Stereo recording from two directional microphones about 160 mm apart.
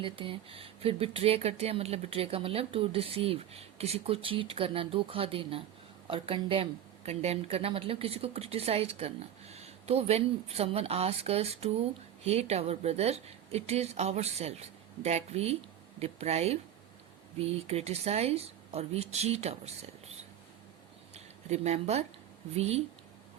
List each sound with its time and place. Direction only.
0.0 s speech: 35° right (ahead or behind)
21.5 s speech: 45° right (ahead or behind)